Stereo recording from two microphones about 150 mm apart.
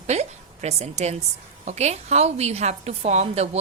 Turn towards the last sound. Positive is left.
turn(degrees=-45)  # may be behind; listen again after turning